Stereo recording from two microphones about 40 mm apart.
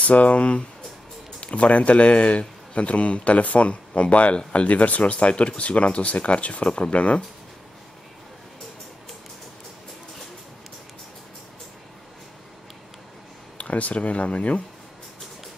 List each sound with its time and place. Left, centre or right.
0.0 s speech: left
13.6 s speech: left